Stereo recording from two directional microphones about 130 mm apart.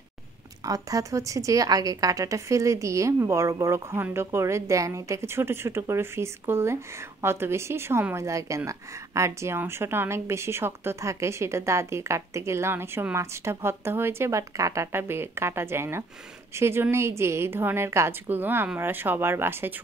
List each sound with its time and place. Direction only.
0.7 s a woman's voice: 25° right (ahead or behind)